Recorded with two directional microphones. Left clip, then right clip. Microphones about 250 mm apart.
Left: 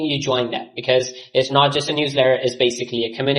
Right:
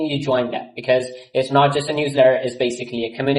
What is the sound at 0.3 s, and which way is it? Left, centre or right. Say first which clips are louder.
Speech: right 1 dB; left.